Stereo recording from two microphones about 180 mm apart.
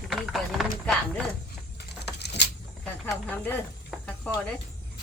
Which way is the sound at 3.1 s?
5° left (ahead or behind).